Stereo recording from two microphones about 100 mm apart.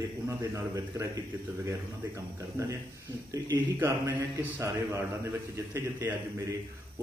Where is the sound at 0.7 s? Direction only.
35° right (ahead or behind).